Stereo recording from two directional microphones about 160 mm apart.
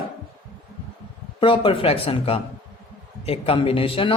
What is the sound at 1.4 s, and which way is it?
Speech, 35° left (ahead or behind).